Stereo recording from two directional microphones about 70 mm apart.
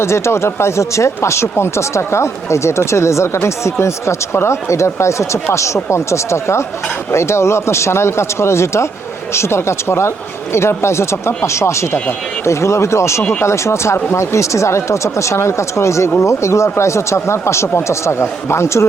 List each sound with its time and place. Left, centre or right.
0.0 s speech: left